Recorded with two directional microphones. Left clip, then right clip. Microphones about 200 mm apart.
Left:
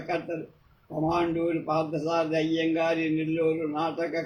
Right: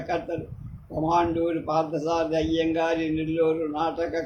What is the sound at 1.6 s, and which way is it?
A man's voice, 20° right (ahead or behind).